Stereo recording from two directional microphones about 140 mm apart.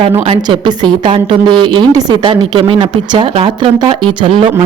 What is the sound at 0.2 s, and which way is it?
A woman's voice, 35° right (ahead or behind).